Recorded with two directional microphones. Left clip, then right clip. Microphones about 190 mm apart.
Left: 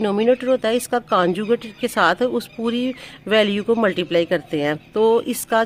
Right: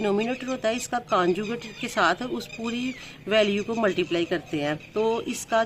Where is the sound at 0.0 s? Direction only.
45° left (ahead or behind).